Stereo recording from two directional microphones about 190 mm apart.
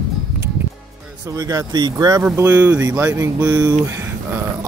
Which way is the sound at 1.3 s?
20° right (ahead or behind).